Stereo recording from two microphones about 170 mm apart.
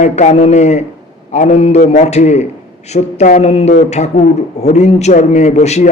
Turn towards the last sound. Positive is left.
turn(degrees=40)  # may be behind; listen again after turning